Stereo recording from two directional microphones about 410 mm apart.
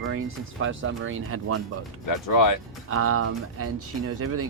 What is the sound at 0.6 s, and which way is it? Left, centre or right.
Speech, right.